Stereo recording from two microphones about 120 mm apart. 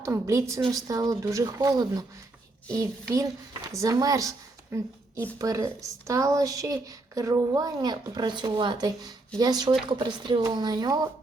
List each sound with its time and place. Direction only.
0.0 s speech: 25° right (ahead or behind)